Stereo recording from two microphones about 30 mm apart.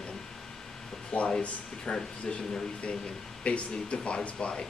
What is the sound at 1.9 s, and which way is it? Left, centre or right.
Speech, left.